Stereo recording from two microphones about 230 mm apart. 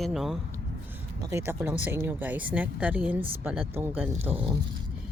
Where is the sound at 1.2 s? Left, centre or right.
Centre.